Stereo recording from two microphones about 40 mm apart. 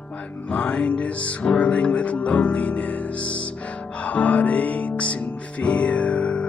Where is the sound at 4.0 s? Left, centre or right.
Left.